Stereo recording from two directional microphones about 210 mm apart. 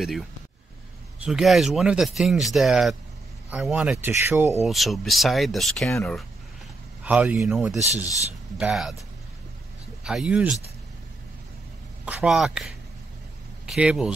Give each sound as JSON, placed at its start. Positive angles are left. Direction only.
{"t": 1.2, "sound": "speech", "side_deg": 0}
{"t": 4.6, "sound": "speech", "side_deg": 0}
{"t": 7.1, "sound": "speech", "side_deg": -5}
{"t": 10.0, "sound": "speech", "side_deg": -5}
{"t": 12.0, "sound": "speech", "side_deg": -5}